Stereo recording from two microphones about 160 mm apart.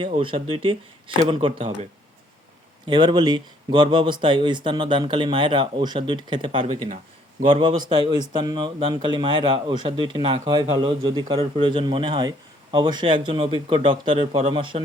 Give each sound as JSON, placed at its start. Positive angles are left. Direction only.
{"t": 0.2, "sound": "a man's voice", "side_deg": -35}